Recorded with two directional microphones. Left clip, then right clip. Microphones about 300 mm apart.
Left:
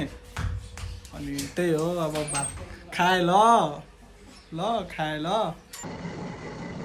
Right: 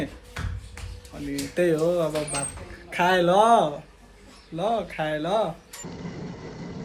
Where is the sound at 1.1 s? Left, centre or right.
Centre.